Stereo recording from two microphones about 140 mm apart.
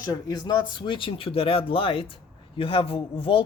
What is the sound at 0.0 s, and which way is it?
Speech, 25° left (ahead or behind).